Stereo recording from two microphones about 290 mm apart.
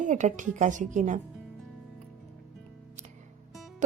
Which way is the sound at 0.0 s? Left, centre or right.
Right.